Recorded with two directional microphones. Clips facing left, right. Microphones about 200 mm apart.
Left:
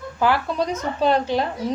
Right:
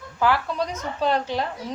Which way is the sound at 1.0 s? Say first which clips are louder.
Left 4 dB; 25° left (ahead or behind).